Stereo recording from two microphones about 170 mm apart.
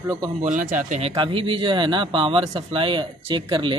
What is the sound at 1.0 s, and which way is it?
Speech, 35° right (ahead or behind).